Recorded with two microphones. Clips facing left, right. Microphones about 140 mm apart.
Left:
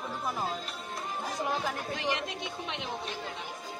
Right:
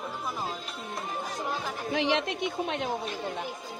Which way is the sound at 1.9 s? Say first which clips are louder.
Right 6 dB; 75° right (ahead or behind).